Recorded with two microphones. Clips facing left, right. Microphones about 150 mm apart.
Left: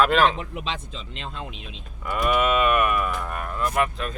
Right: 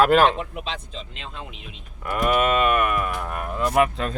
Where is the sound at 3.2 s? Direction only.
10° right (ahead or behind).